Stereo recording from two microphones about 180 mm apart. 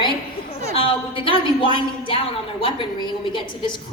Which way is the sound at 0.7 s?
30° left (ahead or behind).